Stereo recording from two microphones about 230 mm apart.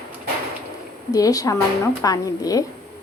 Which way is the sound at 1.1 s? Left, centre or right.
Centre.